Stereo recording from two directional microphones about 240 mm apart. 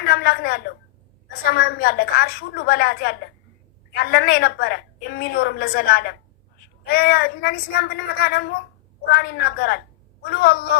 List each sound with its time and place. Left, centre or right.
0.0 s a woman's voice: left